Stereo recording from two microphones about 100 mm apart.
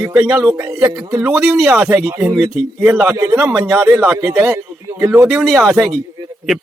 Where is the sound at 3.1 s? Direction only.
30° right (ahead or behind).